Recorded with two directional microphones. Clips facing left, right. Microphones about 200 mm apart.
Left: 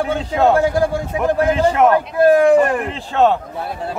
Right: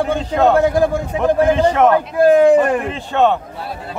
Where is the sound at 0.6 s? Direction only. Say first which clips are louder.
Right 2 dB; 20° right (ahead or behind).